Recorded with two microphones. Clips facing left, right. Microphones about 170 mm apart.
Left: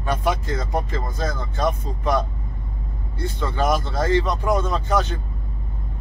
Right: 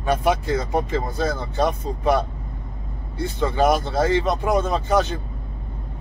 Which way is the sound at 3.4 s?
10° right (ahead or behind).